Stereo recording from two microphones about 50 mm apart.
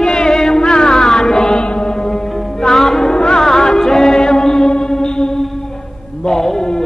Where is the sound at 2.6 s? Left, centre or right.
Centre.